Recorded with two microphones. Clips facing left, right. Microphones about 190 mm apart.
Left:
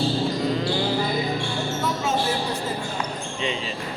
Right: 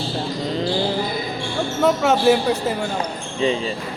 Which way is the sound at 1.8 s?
70° right (ahead or behind).